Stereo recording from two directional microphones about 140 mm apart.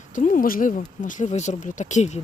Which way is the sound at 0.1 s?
70° left (ahead or behind).